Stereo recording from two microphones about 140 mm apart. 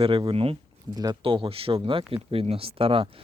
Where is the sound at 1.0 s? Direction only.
30° right (ahead or behind).